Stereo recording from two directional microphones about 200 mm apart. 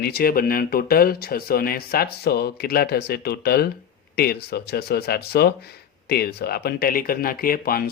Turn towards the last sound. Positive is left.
turn(degrees=45)  # may be behind; listen again after turning